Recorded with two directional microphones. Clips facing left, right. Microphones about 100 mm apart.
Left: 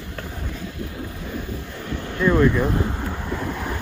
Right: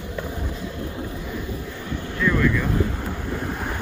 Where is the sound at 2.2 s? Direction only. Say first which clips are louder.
Left 4 dB; 30° left (ahead or behind).